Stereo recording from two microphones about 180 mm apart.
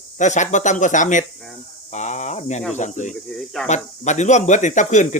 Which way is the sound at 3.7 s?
40° left (ahead or behind).